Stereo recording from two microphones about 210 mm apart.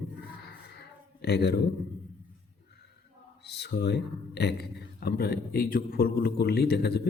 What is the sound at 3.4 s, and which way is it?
Speech, 50° left (ahead or behind).